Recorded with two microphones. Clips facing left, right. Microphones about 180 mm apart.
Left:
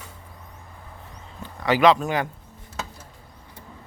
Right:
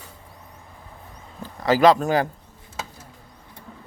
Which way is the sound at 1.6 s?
35° right (ahead or behind).